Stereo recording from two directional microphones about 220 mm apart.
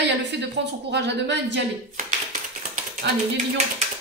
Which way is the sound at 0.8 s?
50° right (ahead or behind).